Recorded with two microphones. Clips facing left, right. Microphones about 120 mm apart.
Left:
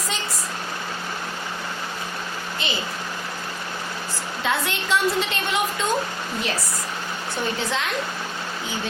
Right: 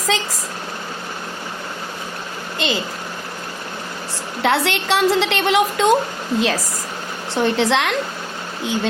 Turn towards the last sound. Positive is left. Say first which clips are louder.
# right 8 dB
turn(degrees=-85)